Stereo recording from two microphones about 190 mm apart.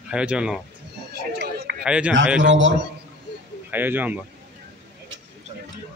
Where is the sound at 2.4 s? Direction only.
75° right (ahead or behind).